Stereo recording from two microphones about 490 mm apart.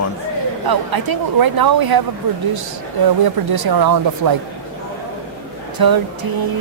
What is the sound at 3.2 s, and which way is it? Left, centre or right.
Speech, right.